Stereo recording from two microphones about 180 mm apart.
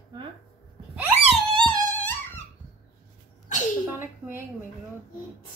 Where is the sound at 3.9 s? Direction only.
10° right (ahead or behind).